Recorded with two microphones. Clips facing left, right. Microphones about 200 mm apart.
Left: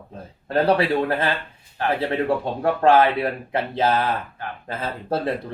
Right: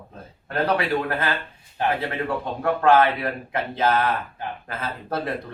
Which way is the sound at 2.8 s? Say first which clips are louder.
Left 2 dB; 30° left (ahead or behind).